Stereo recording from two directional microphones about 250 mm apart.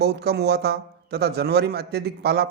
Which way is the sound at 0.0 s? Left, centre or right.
Right.